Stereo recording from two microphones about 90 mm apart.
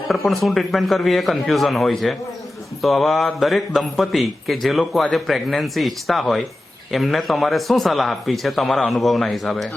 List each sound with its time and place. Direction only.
0.1 s speech: centre (ahead or behind)